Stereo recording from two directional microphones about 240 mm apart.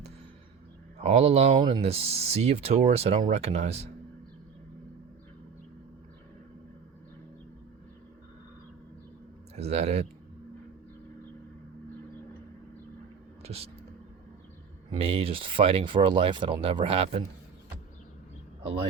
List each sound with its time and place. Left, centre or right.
1.0 s speech: right
9.6 s speech: right
13.4 s speech: right
14.9 s speech: right